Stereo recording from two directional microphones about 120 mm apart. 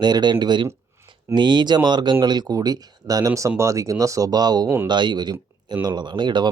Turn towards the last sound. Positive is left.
turn(degrees=-40)  # may be behind; listen again after turning